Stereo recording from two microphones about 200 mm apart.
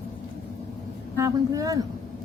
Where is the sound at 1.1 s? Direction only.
15° right (ahead or behind).